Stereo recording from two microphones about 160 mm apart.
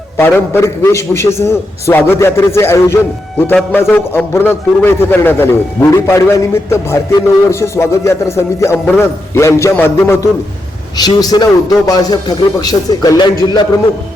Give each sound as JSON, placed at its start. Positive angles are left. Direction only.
{"t": 0.2, "sound": "a man's voice", "side_deg": 15}